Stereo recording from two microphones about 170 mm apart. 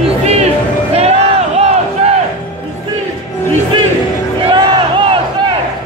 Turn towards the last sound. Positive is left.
turn(degrees=-30)  # may be behind; listen again after turning